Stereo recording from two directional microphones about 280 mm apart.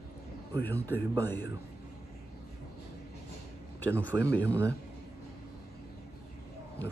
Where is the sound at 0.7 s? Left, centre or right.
Centre.